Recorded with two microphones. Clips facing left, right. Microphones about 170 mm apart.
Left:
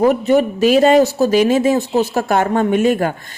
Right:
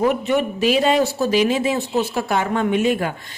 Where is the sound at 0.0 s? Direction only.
40° left (ahead or behind).